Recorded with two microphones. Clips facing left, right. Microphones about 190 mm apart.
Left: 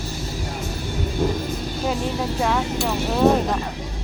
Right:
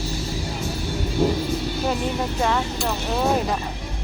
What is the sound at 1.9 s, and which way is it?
Speech, centre (ahead or behind).